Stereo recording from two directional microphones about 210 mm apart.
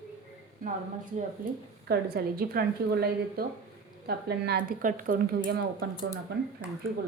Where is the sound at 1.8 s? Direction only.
50° right (ahead or behind).